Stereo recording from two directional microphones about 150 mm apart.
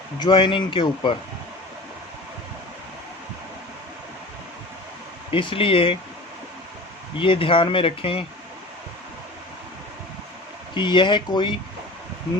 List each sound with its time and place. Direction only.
0.2 s speech: 35° left (ahead or behind)
5.3 s speech: 35° left (ahead or behind)
7.2 s speech: 35° left (ahead or behind)
10.8 s speech: 30° left (ahead or behind)